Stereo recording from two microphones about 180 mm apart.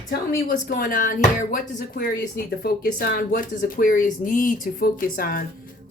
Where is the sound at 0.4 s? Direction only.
50° left (ahead or behind).